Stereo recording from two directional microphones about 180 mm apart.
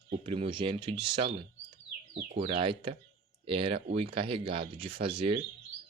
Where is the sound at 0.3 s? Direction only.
30° right (ahead or behind).